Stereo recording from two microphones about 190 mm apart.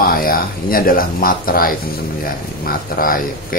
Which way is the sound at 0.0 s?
50° left (ahead or behind).